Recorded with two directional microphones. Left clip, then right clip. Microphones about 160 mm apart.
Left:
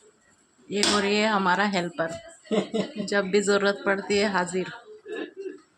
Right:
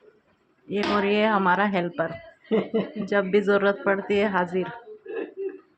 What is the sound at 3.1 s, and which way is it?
A woman's voice, 15° left (ahead or behind).